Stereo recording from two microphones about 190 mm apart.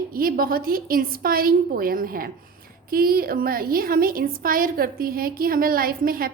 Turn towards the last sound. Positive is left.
turn(degrees=-50)  # may be behind; listen again after turning